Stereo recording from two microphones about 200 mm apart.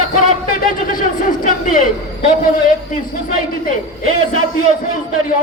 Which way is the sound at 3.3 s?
45° left (ahead or behind).